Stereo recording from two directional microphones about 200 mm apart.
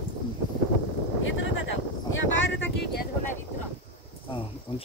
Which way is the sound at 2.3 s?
65° left (ahead or behind).